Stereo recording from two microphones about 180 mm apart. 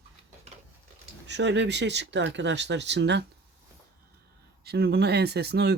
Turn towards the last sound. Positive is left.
turn(degrees=-65)  # may be behind; listen again after turning